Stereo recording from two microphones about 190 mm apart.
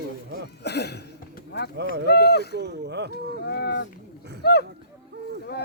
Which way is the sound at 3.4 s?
60° left (ahead or behind).